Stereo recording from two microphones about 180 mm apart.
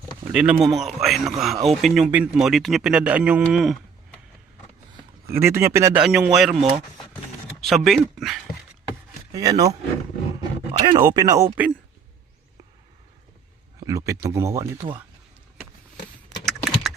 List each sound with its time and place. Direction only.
0.3 s speech: 5° right (ahead or behind)
5.4 s speech: 15° right (ahead or behind)
6.0 s speech: 5° right (ahead or behind)
9.3 s speech: 20° right (ahead or behind)
10.8 s speech: 25° right (ahead or behind)
13.7 s speech: 15° right (ahead or behind)
16.5 s keys jangling: centre (ahead or behind)